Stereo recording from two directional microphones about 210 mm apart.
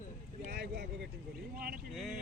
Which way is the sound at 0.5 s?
50° right (ahead or behind).